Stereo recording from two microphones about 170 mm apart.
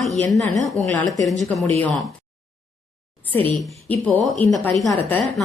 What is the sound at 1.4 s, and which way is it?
Speech, centre (ahead or behind).